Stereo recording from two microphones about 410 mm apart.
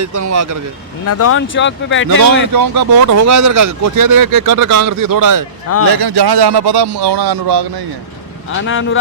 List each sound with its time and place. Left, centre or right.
0.0 s speech: right
1.0 s speech: left
2.5 s speech: right
3.2 s speech: right
3.9 s speech: right
5.9 s speech: right
8.4 s speech: left